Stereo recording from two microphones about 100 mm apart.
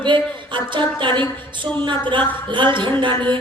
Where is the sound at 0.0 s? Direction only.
55° right (ahead or behind).